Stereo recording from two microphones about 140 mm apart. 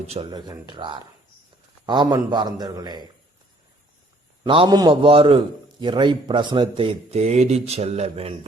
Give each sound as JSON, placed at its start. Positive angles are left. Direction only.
{"t": 0.1, "sound": "speech", "side_deg": -35}
{"t": 4.4, "sound": "speech", "side_deg": -35}